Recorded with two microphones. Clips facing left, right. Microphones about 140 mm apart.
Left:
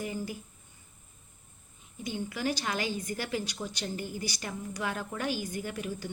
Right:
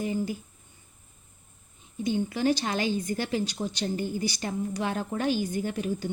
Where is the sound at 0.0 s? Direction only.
25° right (ahead or behind).